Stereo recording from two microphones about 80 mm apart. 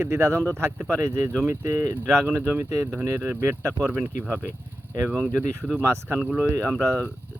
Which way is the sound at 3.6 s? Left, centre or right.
Right.